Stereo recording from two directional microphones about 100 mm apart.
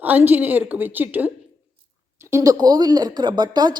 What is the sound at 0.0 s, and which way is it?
A woman's voice, 20° right (ahead or behind).